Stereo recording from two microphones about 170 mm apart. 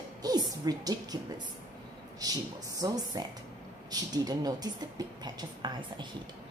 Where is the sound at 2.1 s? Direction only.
20° right (ahead or behind).